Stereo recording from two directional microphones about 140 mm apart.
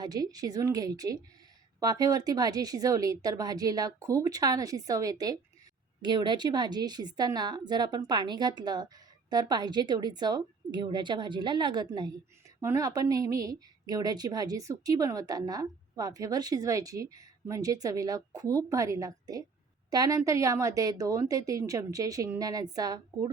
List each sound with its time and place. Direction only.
0.0 s a woman's voice: 25° right (ahead or behind)
12.5 s speech: 20° right (ahead or behind)